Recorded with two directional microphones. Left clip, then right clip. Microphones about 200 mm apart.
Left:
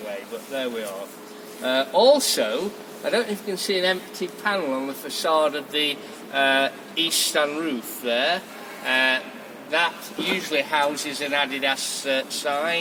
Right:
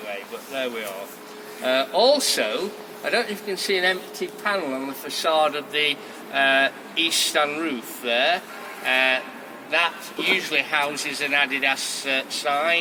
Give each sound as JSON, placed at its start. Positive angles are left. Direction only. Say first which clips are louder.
{"t": 1.6, "sound": "speech", "louder": "left 1 dB", "side_deg": 15}
{"t": 10.2, "sound": "speech", "louder": "right 2 dB", "side_deg": 15}